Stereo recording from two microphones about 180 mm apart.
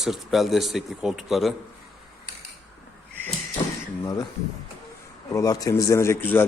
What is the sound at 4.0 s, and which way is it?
Speech, 20° left (ahead or behind).